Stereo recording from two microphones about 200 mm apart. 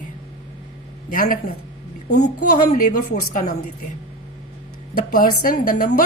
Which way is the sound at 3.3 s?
40° left (ahead or behind).